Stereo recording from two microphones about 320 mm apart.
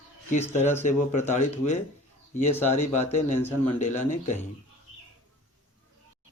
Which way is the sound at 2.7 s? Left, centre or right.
Left.